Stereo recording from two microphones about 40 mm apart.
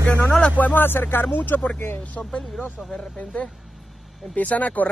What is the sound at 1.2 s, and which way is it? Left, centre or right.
Speech, left.